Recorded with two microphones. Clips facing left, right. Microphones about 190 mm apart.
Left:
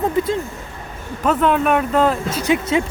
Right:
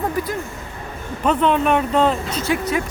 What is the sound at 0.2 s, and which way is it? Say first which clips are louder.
Speech: left 5 dB; 25° left (ahead or behind).